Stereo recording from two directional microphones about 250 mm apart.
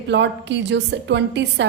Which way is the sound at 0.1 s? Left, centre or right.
Right.